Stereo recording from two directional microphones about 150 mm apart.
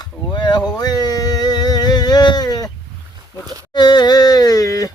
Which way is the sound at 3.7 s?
30° left (ahead or behind).